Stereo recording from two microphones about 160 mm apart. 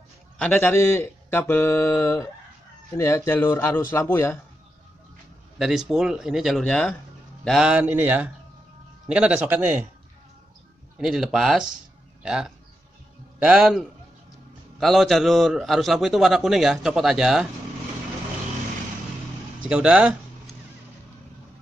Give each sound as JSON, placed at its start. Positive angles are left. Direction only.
{"t": 0.4, "sound": "speech", "side_deg": 10}
{"t": 5.6, "sound": "a man's voice", "side_deg": 0}
{"t": 11.0, "sound": "a man's voice", "side_deg": -5}
{"t": 19.7, "sound": "a man's voice", "side_deg": -5}